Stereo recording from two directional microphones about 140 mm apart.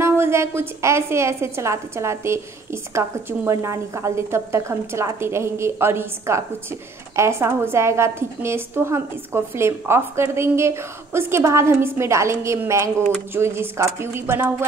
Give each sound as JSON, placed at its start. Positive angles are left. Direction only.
{"t": 0.0, "sound": "a woman's voice", "side_deg": -20}